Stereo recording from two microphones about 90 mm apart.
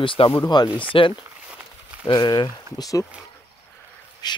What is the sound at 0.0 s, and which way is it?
Speech, 80° left.